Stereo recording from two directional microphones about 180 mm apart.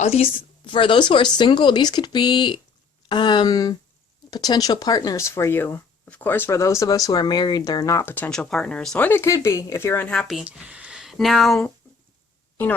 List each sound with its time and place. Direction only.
0.0 s a woman's voice: 35° left (ahead or behind); by 11.7 s centre (ahead or behind)